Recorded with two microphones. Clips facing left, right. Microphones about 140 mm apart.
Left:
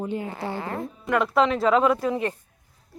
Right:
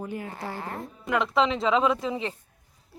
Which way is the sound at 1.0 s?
Centre (ahead or behind).